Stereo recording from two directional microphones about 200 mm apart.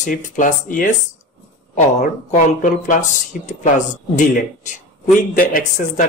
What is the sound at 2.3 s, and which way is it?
Speech, 40° left (ahead or behind).